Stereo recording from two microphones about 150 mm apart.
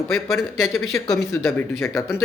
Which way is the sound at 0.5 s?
Centre (ahead or behind).